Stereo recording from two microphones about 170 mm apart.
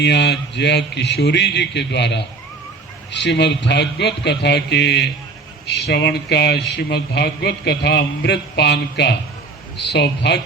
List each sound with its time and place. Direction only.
0.0 s a man's voice: 90° left